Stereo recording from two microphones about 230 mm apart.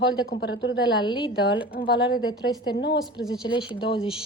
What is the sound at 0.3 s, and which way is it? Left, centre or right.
Speech, left.